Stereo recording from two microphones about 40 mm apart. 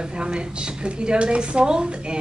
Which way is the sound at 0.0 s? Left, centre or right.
Right.